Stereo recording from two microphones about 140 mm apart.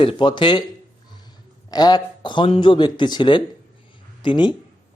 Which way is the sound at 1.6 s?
30° left (ahead or behind).